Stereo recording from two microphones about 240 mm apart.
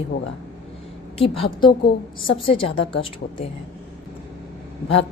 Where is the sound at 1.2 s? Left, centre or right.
Left.